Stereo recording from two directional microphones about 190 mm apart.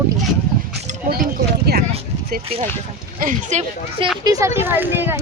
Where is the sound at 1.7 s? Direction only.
55° right (ahead or behind).